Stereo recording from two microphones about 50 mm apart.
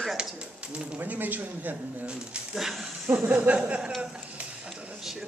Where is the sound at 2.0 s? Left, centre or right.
Centre.